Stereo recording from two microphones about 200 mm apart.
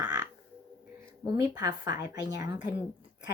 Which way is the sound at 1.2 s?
20° right (ahead or behind).